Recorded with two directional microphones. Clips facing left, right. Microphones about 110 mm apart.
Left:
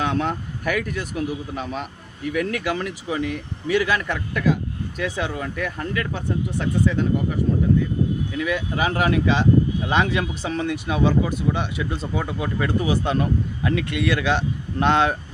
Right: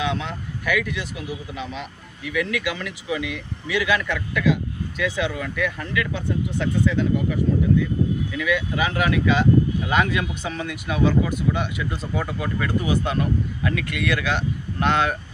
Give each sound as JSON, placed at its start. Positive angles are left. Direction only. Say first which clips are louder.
{"t": 0.0, "sound": "speech", "louder": "left 3 dB", "side_deg": 45}
{"t": 8.4, "sound": "speech", "louder": "even", "side_deg": 35}